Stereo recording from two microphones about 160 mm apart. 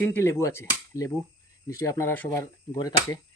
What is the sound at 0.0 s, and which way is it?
Speech, 15° left (ahead or behind).